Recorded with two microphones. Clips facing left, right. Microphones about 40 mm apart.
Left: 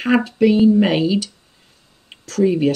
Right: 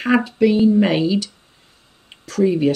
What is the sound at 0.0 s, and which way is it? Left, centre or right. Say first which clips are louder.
Speech: left 1 dB; centre.